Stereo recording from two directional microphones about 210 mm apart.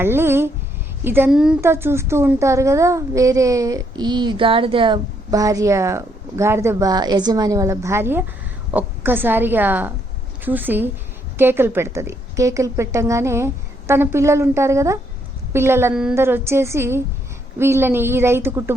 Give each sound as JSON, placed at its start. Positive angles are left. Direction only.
{"t": 0.0, "sound": "a woman's voice", "side_deg": -10}